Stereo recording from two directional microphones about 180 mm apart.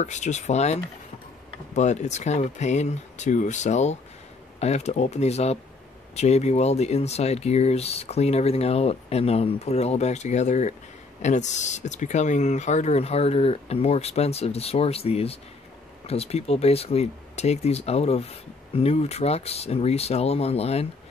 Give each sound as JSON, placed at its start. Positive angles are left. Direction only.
{"t": 0.0, "sound": "speech", "side_deg": 40}
{"t": 1.8, "sound": "speech", "side_deg": 40}